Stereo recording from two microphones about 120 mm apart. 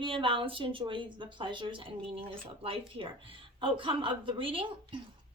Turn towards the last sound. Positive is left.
turn(degrees=-45)  # may be behind; listen again after turning